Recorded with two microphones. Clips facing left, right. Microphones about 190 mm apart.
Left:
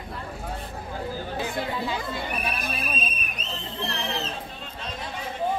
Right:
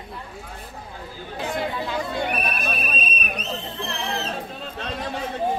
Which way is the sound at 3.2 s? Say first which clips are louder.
Right 6 dB; 70° right (ahead or behind).